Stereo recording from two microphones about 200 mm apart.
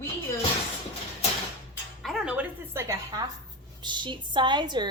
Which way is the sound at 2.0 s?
5° right (ahead or behind).